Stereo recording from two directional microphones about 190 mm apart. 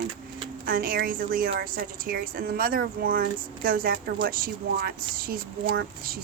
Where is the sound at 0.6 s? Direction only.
50° right (ahead or behind).